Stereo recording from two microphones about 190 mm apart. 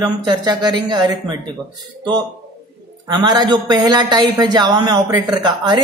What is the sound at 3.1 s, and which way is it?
A man's voice, 20° right (ahead or behind).